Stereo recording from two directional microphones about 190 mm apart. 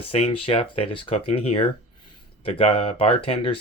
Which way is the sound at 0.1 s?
30° left (ahead or behind).